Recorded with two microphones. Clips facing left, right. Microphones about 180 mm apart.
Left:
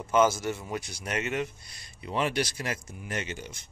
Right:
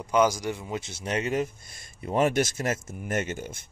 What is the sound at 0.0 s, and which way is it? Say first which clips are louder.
Speech: right 1 dB; 15° right (ahead or behind).